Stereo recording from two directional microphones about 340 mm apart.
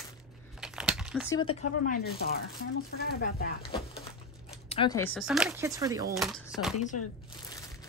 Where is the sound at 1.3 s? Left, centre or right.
Centre.